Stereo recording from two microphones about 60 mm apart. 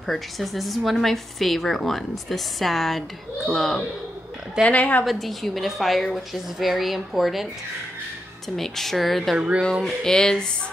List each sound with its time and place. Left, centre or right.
0.0 s a woman's voice: centre
4.6 s a woman's voice: left
5.0 s a woman's voice: centre
8.5 s a woman's voice: centre
9.4 s speech: right
10.0 s speech: centre